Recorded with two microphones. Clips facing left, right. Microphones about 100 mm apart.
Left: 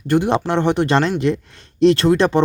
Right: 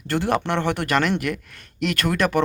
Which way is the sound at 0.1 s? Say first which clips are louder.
Left 5 dB; 20° left (ahead or behind).